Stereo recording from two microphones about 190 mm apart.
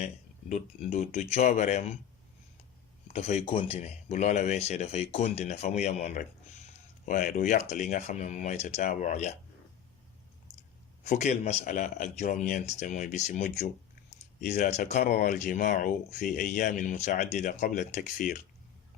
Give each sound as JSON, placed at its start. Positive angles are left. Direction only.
{"t": 0.0, "sound": "speech", "side_deg": 40}
{"t": 3.1, "sound": "speech", "side_deg": 35}
{"t": 11.0, "sound": "speech", "side_deg": 40}